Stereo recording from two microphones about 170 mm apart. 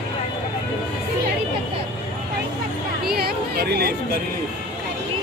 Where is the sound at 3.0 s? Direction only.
65° right (ahead or behind).